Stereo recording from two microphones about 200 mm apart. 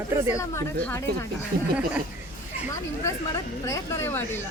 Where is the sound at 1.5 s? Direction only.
50° right (ahead or behind).